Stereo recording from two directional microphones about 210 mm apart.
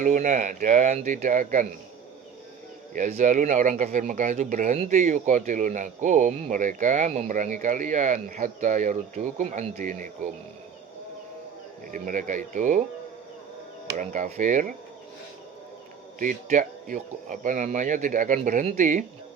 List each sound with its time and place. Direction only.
0.0 s speech: 35° right (ahead or behind)
2.9 s speech: 35° right (ahead or behind)
11.9 s speech: 40° right (ahead or behind)
14.0 s speech: 40° right (ahead or behind)
16.2 s speech: 40° right (ahead or behind)